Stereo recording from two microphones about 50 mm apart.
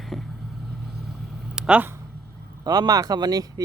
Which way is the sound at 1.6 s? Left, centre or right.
Centre.